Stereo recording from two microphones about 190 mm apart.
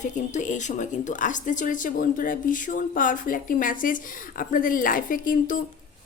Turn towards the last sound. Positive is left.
turn(degrees=45)  # may be behind; listen again after turning